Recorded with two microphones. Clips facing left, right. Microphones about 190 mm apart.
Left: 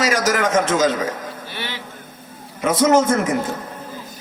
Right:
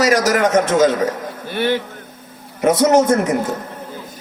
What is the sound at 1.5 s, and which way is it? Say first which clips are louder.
Speech: right 15 dB; 50° right (ahead or behind).